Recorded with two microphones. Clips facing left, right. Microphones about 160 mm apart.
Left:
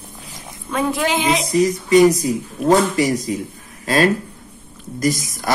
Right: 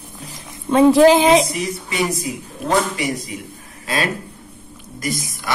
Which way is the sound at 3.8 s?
40° left (ahead or behind).